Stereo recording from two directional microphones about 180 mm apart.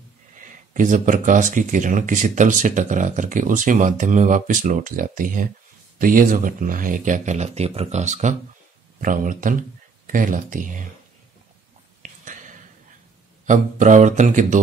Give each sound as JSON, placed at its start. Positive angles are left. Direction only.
{"t": 0.4, "sound": "speech", "side_deg": -45}
{"t": 12.0, "sound": "whispering", "side_deg": -45}
{"t": 13.5, "sound": "speech", "side_deg": -45}